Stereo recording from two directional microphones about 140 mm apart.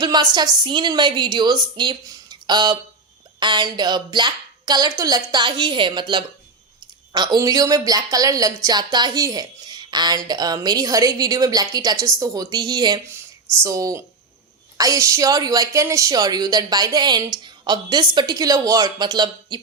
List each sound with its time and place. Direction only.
0.0 s a woman's voice: 30° right (ahead or behind)
13.1 s a woman's voice: 20° right (ahead or behind)